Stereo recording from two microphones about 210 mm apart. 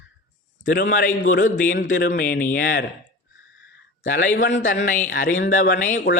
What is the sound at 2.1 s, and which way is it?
Speech, 45° left (ahead or behind).